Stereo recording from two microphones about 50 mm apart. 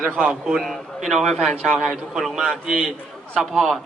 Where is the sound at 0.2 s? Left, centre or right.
Centre.